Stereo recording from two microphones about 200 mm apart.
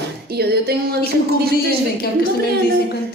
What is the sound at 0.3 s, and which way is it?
Music, 55° right (ahead or behind).